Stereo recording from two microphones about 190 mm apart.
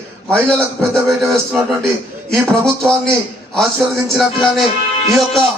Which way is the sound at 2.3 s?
5° left (ahead or behind).